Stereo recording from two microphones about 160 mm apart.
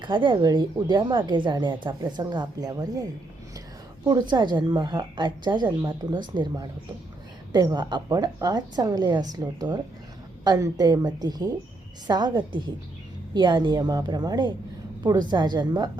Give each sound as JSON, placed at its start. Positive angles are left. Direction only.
{"t": 0.0, "sound": "a woman's voice", "side_deg": -30}